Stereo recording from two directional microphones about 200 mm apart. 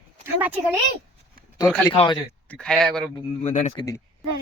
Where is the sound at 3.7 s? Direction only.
20° left (ahead or behind).